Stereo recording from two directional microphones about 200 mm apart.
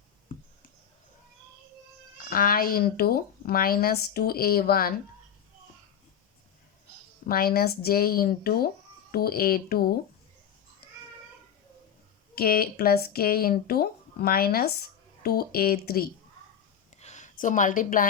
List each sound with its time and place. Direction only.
2.1 s speech: 45° left (ahead or behind)
7.3 s speech: 50° left (ahead or behind)
12.3 s speech: 50° left (ahead or behind)
17.0 s a woman's voice: 35° left (ahead or behind)